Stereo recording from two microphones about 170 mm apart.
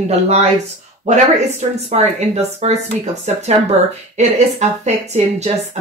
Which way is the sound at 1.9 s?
40° right (ahead or behind).